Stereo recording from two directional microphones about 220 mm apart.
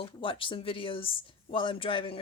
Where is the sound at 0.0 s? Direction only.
25° left (ahead or behind).